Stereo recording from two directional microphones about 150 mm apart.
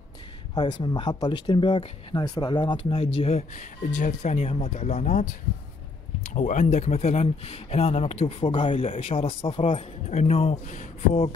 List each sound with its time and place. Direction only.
0.6 s speech: 30° left (ahead or behind); by 5.3 s 50° left (ahead or behind)
6.3 s speech: 50° left (ahead or behind)